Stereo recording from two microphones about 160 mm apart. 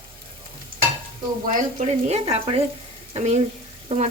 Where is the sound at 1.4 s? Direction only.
55° right (ahead or behind).